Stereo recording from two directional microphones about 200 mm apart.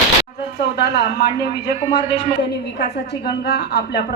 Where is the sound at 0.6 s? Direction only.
55° left (ahead or behind).